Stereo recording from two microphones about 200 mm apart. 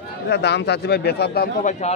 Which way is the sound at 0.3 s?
60° left (ahead or behind).